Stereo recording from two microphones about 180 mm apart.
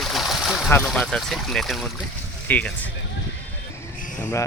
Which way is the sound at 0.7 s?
5° left (ahead or behind).